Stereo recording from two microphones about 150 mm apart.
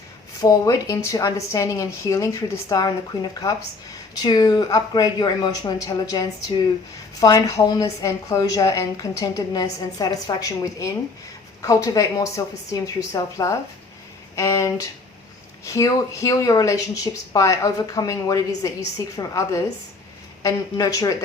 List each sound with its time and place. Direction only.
0.4 s a woman's voice: 20° left (ahead or behind)